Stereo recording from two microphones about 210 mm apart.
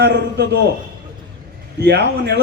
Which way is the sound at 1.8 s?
50° right (ahead or behind).